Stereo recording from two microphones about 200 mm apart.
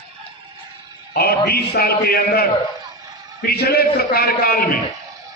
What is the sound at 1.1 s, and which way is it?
A man's voice, 50° left (ahead or behind).